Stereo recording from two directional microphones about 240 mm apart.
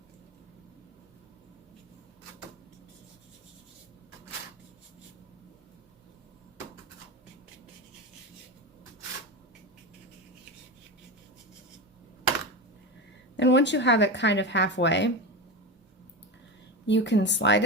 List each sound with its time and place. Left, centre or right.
13.3 s speech: left
16.8 s speech: left